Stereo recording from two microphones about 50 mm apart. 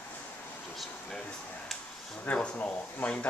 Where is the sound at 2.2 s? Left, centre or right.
Left.